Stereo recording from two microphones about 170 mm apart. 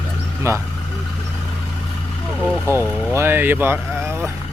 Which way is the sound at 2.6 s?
15° right (ahead or behind).